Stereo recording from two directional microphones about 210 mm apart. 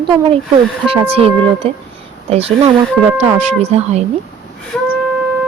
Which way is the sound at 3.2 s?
30° right (ahead or behind).